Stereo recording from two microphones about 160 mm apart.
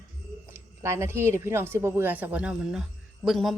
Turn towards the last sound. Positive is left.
turn(degrees=0)  # may be behind; listen again after turning